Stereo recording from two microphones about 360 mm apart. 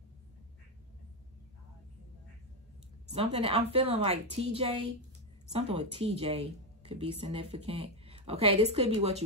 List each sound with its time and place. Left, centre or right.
3.1 s speech: centre